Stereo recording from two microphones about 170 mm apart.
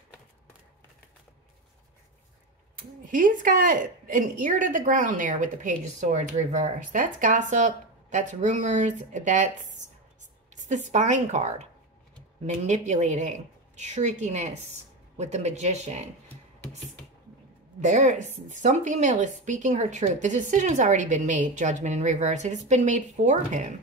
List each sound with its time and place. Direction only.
2.8 s a woman's voice: 55° right (ahead or behind)
17.7 s a woman's voice: 45° right (ahead or behind)